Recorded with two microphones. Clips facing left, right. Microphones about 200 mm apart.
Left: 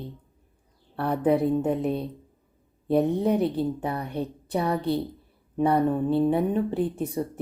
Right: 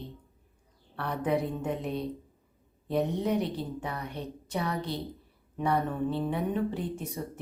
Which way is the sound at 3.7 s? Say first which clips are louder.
Left 7 dB; 35° left (ahead or behind).